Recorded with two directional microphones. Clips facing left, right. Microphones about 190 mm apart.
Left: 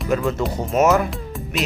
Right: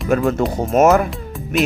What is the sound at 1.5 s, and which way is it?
Music, centre (ahead or behind).